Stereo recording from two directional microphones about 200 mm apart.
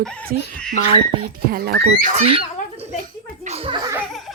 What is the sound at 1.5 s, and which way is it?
Speech, 50° right (ahead or behind).